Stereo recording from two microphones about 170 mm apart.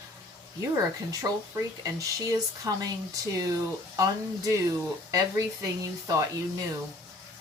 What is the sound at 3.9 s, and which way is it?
Speech, 20° right (ahead or behind).